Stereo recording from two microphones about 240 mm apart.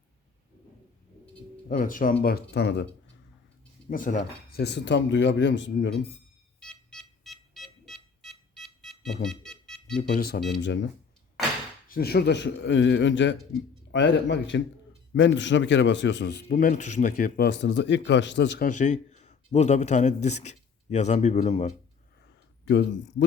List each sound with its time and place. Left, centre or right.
1.6 s a man's voice: left
3.8 s a man's voice: left
6.6 s a sound: centre
10.0 s speech: left
11.9 s a man's voice: left
18.8 s a man's voice: left
22.6 s speech: left